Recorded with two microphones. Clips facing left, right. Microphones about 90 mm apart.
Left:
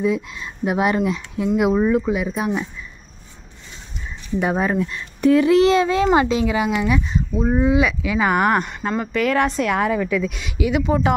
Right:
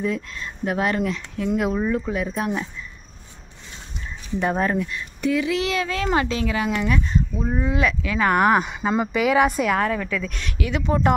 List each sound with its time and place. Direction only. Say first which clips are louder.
0.0 s speech: left 4 dB; 10° left (ahead or behind)
4.4 s speech: left 2 dB; 10° left (ahead or behind)
4.7 s speech: left 3 dB; 30° left (ahead or behind)
5.2 s a child's voice: left 9 dB; 40° left (ahead or behind); by 8.6 s centre (ahead or behind)
8.6 s speech: right 1 dB; 10° right (ahead or behind)
9.8 s speech: left 4 dB; 5° left (ahead or behind)